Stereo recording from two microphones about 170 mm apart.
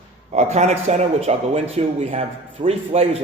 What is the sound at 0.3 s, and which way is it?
Speech, 40° right (ahead or behind).